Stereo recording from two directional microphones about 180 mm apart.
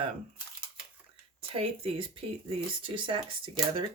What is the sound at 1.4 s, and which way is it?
Speech, 30° right (ahead or behind).